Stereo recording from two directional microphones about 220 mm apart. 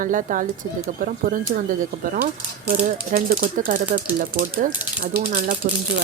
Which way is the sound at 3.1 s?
40° right (ahead or behind).